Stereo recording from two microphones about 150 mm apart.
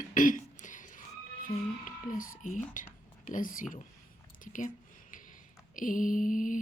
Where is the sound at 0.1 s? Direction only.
60° left (ahead or behind).